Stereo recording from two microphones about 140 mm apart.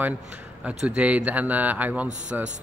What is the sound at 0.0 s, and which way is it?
A man's voice, 10° right (ahead or behind).